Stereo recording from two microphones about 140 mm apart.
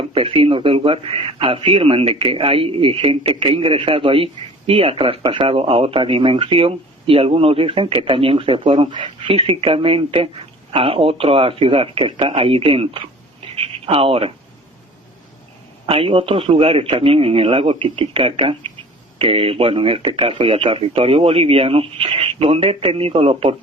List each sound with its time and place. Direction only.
0.1 s speech: 40° right (ahead or behind)
15.9 s speech: 40° right (ahead or behind)